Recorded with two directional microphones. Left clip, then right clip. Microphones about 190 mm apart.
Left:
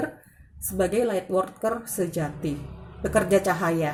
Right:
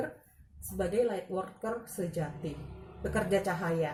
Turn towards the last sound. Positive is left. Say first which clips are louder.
# left 8 dB
turn(degrees=45)  # may be behind; listen again after turning